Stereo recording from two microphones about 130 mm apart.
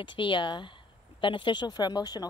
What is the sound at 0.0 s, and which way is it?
Speech, 40° left (ahead or behind).